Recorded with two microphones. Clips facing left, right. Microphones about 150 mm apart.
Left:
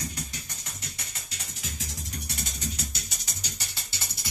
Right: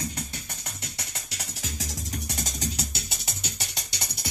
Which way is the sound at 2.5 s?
75° right (ahead or behind).